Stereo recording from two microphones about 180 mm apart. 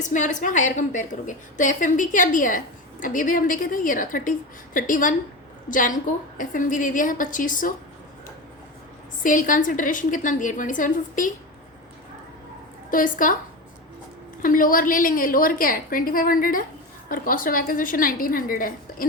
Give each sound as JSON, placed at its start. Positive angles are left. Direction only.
{"t": 0.0, "sound": "a woman's voice", "side_deg": 45}
{"t": 9.2, "sound": "a woman's voice", "side_deg": 45}
{"t": 12.9, "sound": "a woman's voice", "side_deg": 50}
{"t": 14.4, "sound": "a woman's voice", "side_deg": 50}